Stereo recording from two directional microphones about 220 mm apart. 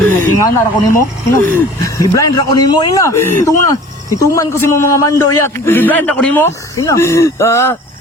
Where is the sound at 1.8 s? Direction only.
15° left (ahead or behind).